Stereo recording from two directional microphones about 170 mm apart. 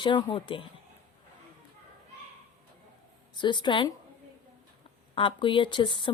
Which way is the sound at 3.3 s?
25° left (ahead or behind).